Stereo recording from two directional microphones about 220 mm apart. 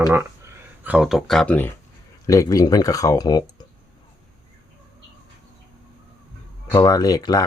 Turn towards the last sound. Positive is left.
turn(degrees=15)  # may be behind; listen again after turning